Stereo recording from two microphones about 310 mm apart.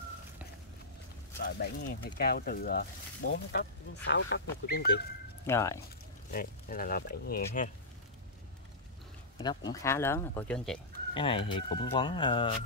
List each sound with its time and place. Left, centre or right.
1.4 s speech: left
5.5 s speech: centre
6.3 s speech: left
9.7 s speech: centre
11.1 s speech: centre